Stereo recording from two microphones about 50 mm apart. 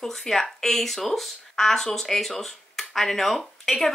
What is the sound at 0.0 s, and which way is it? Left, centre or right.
Speech, centre.